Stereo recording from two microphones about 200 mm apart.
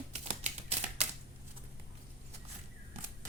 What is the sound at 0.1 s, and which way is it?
Typewriter, 35° right (ahead or behind).